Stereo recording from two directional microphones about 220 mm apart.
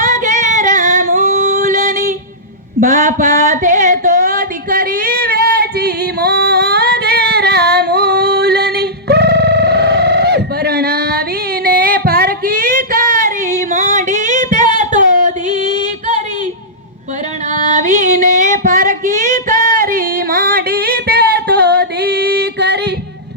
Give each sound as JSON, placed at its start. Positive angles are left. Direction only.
{"t": 0.0, "sound": "singing", "side_deg": -35}
{"t": 2.8, "sound": "a sound", "side_deg": -35}
{"t": 14.7, "sound": "singing", "side_deg": -35}
{"t": 17.7, "sound": "female singing", "side_deg": -35}
{"t": 19.5, "sound": "music", "side_deg": -40}